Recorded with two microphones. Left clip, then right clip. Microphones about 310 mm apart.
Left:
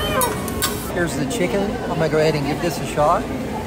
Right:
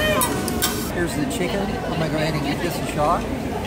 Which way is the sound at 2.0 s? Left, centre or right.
Centre.